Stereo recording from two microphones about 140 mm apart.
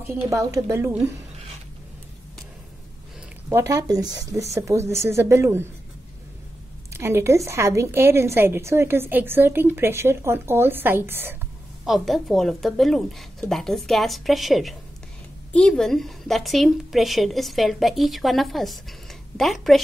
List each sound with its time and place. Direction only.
0.0 s speech: 20° right (ahead or behind)
3.4 s speech: 20° right (ahead or behind)
6.9 s a woman's voice: 20° right (ahead or behind)
11.8 s a woman's voice: centre (ahead or behind)